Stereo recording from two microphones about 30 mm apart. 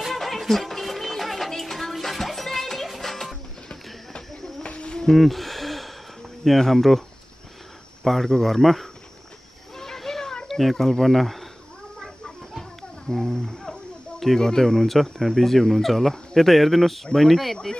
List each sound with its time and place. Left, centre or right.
0.1 s a sound: centre
1.6 s music: centre
4.3 s a sound: centre
4.6 s insect: left
5.1 s gasp: centre
6.4 s speech: centre
9.8 s a sound: centre
10.5 s speech: centre
13.1 s speech: centre